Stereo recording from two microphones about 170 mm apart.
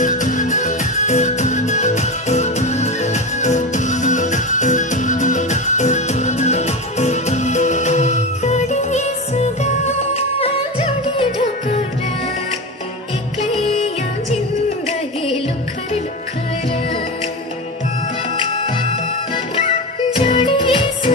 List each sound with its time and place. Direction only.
0.0 s music: 50° left (ahead or behind)
13.4 s music: 35° left (ahead or behind)
18.3 s music: 35° left (ahead or behind)